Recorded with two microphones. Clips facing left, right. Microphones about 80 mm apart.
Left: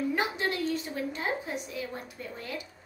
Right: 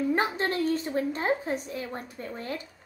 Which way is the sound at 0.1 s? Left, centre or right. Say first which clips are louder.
Right 3 dB; right.